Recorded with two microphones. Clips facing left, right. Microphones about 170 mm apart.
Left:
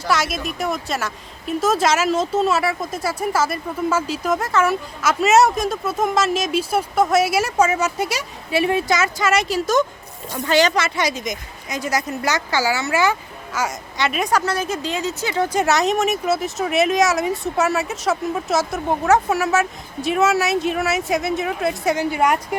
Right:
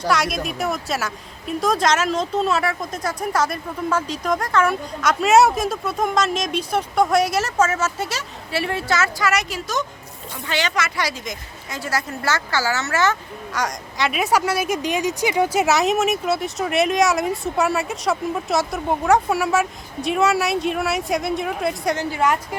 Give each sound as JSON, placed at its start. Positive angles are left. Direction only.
{"t": 0.1, "sound": "a woman's voice", "side_deg": 0}
{"t": 10.3, "sound": "speech", "side_deg": 40}
{"t": 10.8, "sound": "a woman's voice", "side_deg": 20}
{"t": 21.9, "sound": "a woman's voice", "side_deg": 15}